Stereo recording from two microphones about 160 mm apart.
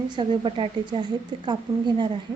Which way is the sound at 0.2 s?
35° right (ahead or behind).